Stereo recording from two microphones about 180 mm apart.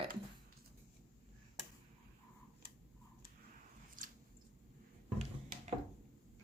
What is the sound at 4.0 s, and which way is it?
Squish, 50° right (ahead or behind).